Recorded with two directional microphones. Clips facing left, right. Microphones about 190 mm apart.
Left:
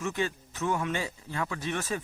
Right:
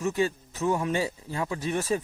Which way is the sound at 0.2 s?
30° right (ahead or behind).